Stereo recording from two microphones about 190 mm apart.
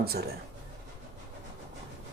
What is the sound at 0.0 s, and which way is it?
Speech, 55° right (ahead or behind).